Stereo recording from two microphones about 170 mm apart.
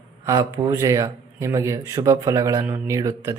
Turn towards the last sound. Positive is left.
turn(degrees=-20)  # may be behind; listen again after turning